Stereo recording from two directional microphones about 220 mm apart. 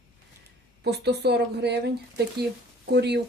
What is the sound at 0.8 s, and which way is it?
Speech, 50° right (ahead or behind).